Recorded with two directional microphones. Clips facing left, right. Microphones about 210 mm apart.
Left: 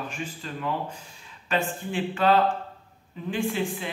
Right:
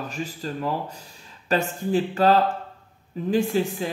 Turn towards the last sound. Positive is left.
turn(degrees=-40)  # may be behind; listen again after turning